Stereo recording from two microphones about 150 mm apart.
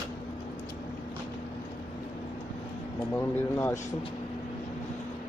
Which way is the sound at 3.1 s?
15° left (ahead or behind).